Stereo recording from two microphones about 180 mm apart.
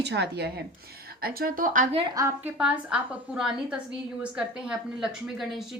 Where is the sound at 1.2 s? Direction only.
55° right (ahead or behind).